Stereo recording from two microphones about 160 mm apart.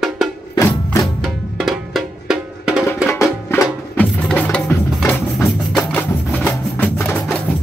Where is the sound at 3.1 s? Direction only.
15° left (ahead or behind).